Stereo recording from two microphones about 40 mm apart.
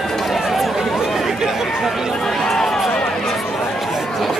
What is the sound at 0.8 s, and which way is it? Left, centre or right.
Chatter, centre.